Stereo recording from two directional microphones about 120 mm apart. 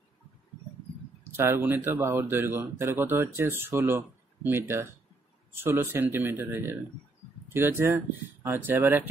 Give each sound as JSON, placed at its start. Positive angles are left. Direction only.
{"t": 1.2, "sound": "speech", "side_deg": -20}